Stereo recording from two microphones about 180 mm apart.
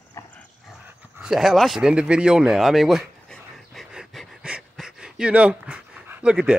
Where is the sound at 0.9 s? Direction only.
5° right (ahead or behind).